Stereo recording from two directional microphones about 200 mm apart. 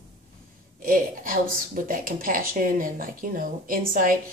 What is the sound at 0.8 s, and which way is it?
Speech, 45° right (ahead or behind).